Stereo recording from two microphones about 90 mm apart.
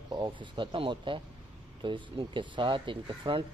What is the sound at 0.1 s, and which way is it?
Speech, 60° right (ahead or behind).